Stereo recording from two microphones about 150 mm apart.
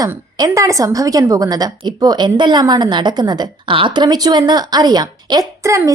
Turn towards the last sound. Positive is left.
turn(degrees=-20)  # may be behind; listen again after turning